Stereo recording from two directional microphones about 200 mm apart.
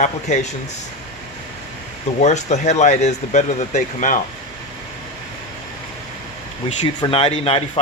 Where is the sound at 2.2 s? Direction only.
35° left (ahead or behind).